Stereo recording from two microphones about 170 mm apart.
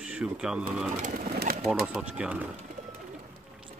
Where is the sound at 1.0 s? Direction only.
60° right (ahead or behind).